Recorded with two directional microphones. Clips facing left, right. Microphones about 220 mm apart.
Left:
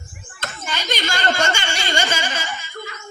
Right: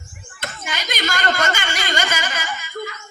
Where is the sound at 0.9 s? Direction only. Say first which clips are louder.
Even; 30° left (ahead or behind).